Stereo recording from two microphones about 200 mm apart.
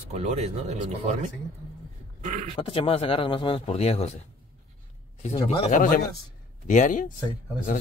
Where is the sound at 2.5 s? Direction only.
25° left (ahead or behind).